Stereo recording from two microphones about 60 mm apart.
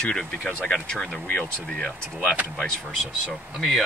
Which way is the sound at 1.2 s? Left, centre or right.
Left.